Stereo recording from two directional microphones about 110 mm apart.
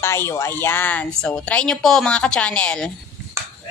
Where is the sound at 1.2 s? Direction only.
5° left (ahead or behind).